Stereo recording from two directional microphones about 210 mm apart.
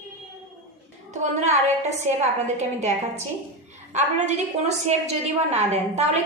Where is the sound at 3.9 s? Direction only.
30° right (ahead or behind).